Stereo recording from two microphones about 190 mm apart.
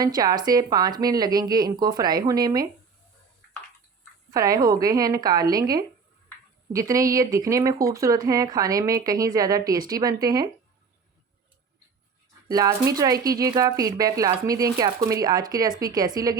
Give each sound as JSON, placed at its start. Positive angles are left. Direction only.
{"t": 0.0, "sound": "speech", "side_deg": -20}
{"t": 4.3, "sound": "speech", "side_deg": -20}
{"t": 12.5, "sound": "speech", "side_deg": -20}